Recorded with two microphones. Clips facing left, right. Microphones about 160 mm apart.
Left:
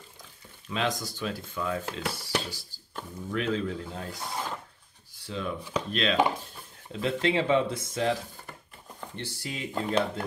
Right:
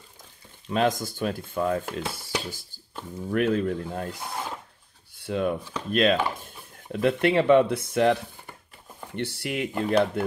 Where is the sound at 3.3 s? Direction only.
55° right (ahead or behind).